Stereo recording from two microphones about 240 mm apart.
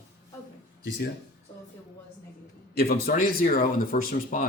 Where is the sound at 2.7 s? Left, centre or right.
Left.